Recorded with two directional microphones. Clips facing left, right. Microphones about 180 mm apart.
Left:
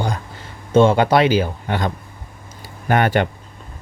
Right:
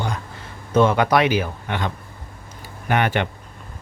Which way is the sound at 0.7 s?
30° left (ahead or behind).